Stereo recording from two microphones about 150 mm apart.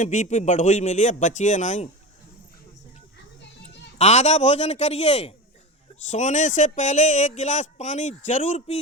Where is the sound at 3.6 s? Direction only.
50° left (ahead or behind).